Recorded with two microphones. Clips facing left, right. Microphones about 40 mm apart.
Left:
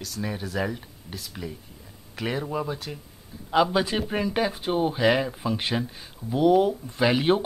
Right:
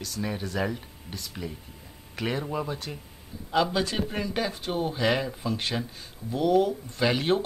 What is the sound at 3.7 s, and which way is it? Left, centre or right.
Speech, centre.